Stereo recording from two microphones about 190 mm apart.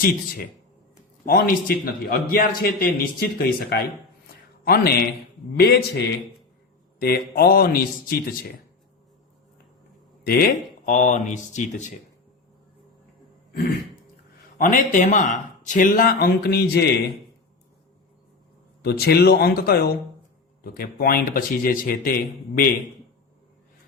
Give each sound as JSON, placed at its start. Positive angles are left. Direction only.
{"t": 1.2, "sound": "a man's voice", "side_deg": 50}
{"t": 7.0, "sound": "a man's voice", "side_deg": 50}
{"t": 10.2, "sound": "speech", "side_deg": 50}
{"t": 14.6, "sound": "a man's voice", "side_deg": 45}
{"t": 18.8, "sound": "a man's voice", "side_deg": 55}